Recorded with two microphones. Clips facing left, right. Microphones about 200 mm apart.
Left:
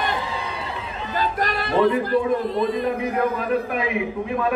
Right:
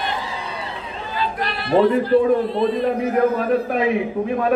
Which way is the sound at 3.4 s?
40° right (ahead or behind).